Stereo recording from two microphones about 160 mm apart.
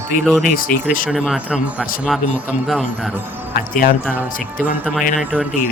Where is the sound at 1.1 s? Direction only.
5° right (ahead or behind).